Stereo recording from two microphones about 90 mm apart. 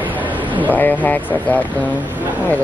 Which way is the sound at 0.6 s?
20° left (ahead or behind).